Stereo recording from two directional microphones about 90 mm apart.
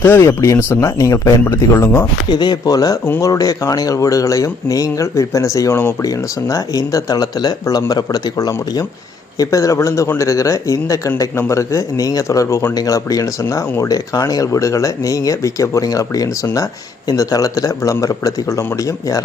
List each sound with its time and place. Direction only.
0.0 s speech: 30° left (ahead or behind)
2.3 s speech: 50° left (ahead or behind)